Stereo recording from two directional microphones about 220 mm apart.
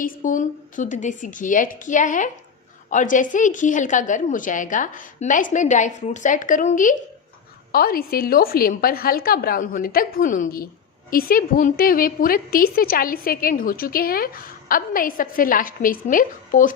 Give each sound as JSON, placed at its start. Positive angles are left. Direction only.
{"t": 0.0, "sound": "a woman's voice", "side_deg": 35}